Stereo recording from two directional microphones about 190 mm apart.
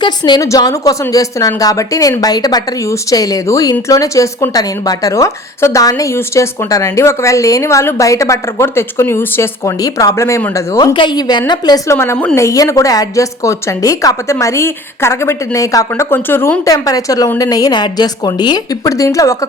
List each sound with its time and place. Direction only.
0.0 s a woman's voice: 20° left (ahead or behind)